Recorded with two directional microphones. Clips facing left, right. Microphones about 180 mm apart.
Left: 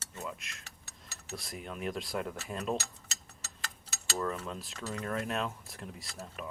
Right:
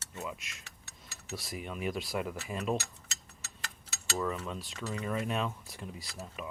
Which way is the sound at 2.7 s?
35° left (ahead or behind).